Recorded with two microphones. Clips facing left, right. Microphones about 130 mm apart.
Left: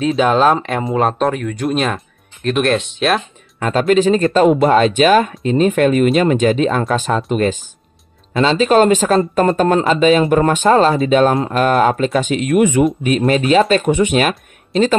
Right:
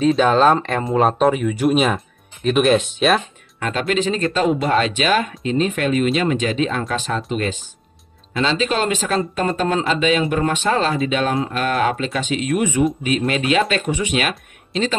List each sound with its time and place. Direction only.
0.0 s speech: 5° left (ahead or behind)
3.5 s speech: 40° left (ahead or behind); by 12.8 s 60° left (ahead or behind)
13.3 s speech: 40° left (ahead or behind)